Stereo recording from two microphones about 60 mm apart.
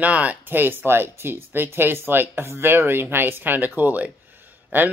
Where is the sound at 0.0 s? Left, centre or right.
Right.